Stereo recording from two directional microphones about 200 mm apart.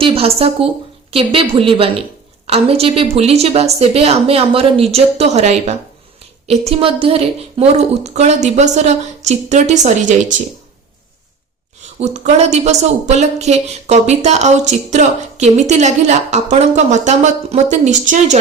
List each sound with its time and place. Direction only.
0.0 s a woman's voice: 30° right (ahead or behind)
11.9 s speech: 35° right (ahead or behind)